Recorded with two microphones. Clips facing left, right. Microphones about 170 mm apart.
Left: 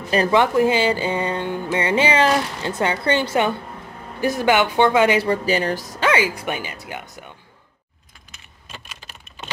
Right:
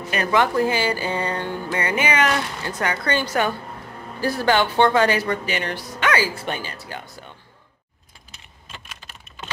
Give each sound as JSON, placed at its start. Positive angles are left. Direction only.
{"t": 0.1, "sound": "a woman's voice", "side_deg": 30}
{"t": 0.4, "sound": "speech", "side_deg": 20}
{"t": 5.2, "sound": "speech", "side_deg": 35}
{"t": 6.3, "sound": "speech", "side_deg": 15}